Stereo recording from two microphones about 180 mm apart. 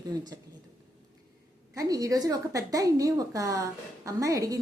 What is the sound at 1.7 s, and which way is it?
A woman's voice, 20° right (ahead or behind).